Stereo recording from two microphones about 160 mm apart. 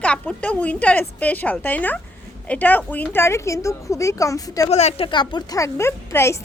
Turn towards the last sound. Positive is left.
turn(degrees=15)  # may be behind; listen again after turning